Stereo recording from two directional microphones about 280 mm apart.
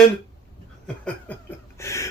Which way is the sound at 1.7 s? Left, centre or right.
Centre.